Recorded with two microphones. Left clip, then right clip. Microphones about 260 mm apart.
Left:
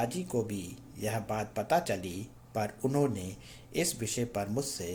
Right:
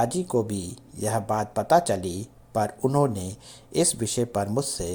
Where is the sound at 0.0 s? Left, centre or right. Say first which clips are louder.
Right 8 dB; right.